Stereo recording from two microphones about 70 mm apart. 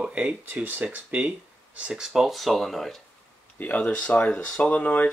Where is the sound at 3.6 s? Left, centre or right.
Left.